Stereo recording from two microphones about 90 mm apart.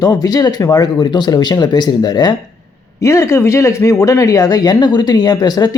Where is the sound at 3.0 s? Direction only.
35° left (ahead or behind).